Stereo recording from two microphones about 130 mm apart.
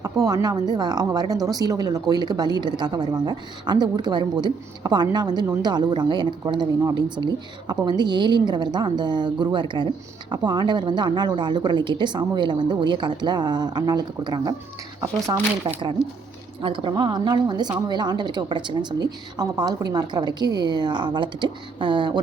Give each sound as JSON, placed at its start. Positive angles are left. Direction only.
{"t": 0.0, "sound": "speech", "side_deg": -30}
{"t": 15.6, "sound": "speech", "side_deg": -40}